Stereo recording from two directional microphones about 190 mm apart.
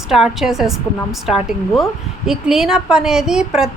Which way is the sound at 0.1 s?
Centre (ahead or behind).